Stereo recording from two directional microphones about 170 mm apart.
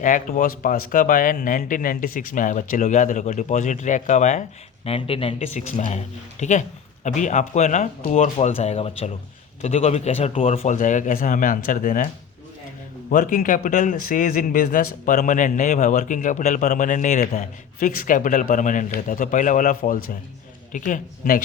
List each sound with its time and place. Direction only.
0.0 s speech: 50° left (ahead or behind)
4.9 s a man's voice: 35° left (ahead or behind)
10.8 s speech: 50° left (ahead or behind)
13.1 s speech: 50° left (ahead or behind)